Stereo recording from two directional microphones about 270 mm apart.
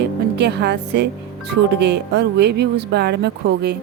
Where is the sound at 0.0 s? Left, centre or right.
Right.